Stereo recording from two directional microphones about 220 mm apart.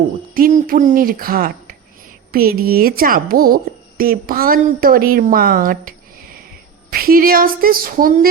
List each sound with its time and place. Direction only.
0.3 s speech: 40° right (ahead or behind)
6.9 s speech: 40° right (ahead or behind)